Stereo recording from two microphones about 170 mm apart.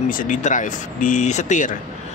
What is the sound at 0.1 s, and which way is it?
Speech, 50° left (ahead or behind).